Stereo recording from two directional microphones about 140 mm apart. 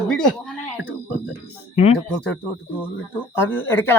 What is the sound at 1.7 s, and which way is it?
Speech, 45° left (ahead or behind).